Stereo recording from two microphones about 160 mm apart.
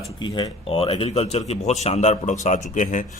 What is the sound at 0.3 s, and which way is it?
A man's voice, 35° left (ahead or behind).